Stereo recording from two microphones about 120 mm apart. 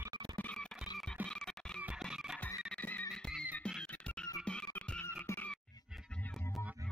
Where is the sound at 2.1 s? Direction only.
5° right (ahead or behind).